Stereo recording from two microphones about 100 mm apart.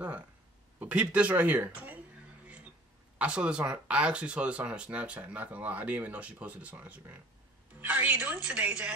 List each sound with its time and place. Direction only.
0.7 s speech: 15° right (ahead or behind)
3.2 s speech: 10° right (ahead or behind)